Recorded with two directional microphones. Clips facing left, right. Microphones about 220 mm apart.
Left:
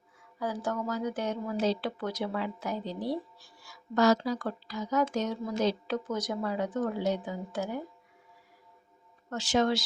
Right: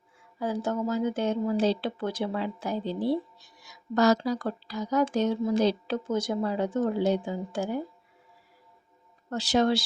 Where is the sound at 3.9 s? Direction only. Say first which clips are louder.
Right 2 dB; 40° right (ahead or behind).